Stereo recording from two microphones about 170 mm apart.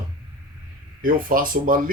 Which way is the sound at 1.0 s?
55° right (ahead or behind).